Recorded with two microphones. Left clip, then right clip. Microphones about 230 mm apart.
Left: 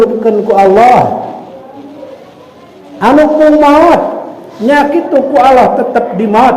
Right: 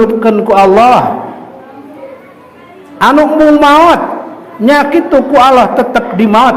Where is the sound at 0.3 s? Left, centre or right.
Right.